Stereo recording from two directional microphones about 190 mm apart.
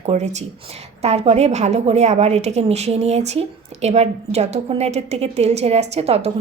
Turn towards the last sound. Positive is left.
turn(degrees=-35)  # may be behind; listen again after turning